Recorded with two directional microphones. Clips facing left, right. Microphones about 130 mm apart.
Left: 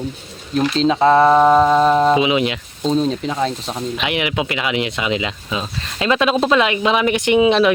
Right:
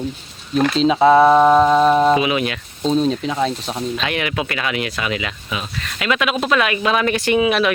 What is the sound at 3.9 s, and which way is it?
Speech, 15° left (ahead or behind).